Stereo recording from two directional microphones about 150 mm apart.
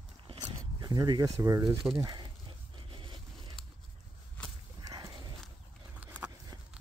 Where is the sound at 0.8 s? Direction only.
30° right (ahead or behind).